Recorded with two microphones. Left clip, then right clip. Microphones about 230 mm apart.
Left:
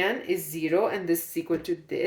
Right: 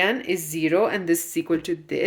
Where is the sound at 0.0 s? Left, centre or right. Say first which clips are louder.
Right 4 dB; right.